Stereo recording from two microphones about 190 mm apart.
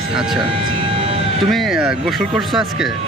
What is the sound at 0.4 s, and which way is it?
Vehicle, 30° right (ahead or behind).